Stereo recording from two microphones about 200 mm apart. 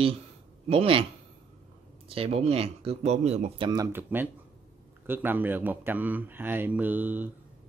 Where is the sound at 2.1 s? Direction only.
30° right (ahead or behind).